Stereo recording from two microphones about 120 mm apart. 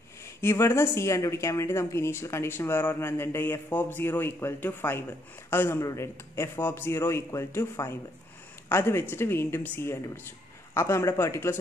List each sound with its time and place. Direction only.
0.4 s a woman's voice: 20° left (ahead or behind)